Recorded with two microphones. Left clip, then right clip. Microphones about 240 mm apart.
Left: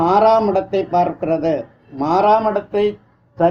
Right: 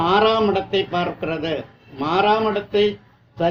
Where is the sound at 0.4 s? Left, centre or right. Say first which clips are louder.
Left 2 dB; left.